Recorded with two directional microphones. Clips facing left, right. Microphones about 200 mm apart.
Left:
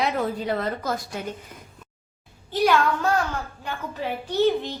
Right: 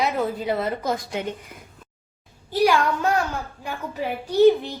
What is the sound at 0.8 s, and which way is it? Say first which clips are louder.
Speech: right 3 dB; 20° right (ahead or behind).